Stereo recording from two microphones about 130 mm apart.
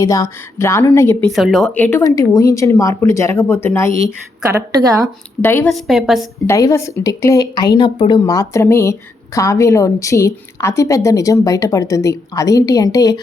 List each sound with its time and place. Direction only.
0.0 s a woman's voice: 25° left (ahead or behind)
1.2 s a woman's voice: centre (ahead or behind)
1.7 s a woman's voice: 15° left (ahead or behind)
4.5 s speech: 25° right (ahead or behind)
5.4 s speech: 15° left (ahead or behind)
5.6 s a woman's voice: centre (ahead or behind)
6.5 s a woman's voice: 20° left (ahead or behind); by 8.2 s 40° left (ahead or behind)
8.2 s a woman's voice: 25° left (ahead or behind)